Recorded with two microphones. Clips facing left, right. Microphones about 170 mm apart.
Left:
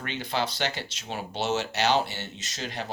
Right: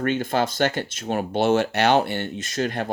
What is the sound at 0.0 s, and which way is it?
Speech, 50° right (ahead or behind).